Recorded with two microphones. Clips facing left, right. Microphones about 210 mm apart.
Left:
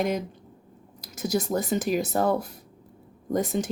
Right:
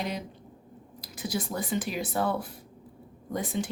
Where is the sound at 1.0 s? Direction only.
45° left (ahead or behind).